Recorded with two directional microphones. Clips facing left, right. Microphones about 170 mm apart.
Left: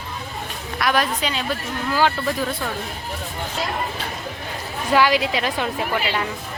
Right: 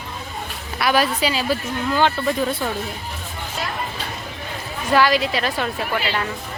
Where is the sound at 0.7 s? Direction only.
5° right (ahead or behind).